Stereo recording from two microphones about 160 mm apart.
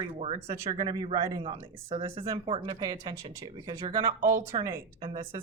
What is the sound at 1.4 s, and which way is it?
A woman's voice, 35° right (ahead or behind).